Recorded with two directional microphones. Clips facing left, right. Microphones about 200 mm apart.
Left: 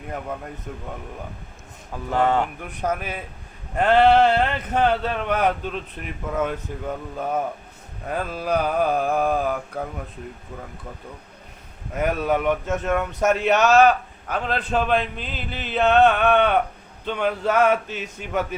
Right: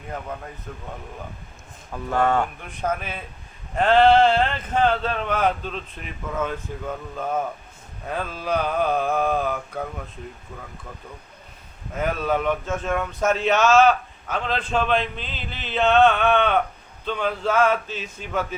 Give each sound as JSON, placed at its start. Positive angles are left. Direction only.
{"t": 1.9, "sound": "speech", "side_deg": 15}
{"t": 11.9, "sound": "speech", "side_deg": 15}